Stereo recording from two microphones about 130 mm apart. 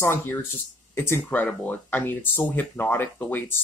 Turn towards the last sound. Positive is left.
turn(degrees=15)  # may be behind; listen again after turning